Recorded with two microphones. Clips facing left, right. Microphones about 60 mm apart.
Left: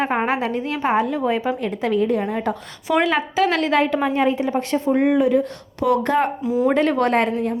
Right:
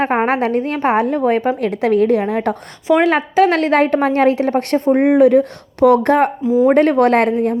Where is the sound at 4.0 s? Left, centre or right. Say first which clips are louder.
Right 5 dB; right.